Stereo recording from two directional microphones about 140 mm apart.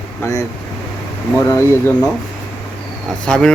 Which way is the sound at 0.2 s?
20° left (ahead or behind).